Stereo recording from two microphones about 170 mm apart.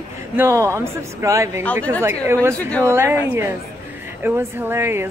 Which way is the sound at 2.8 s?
15° right (ahead or behind).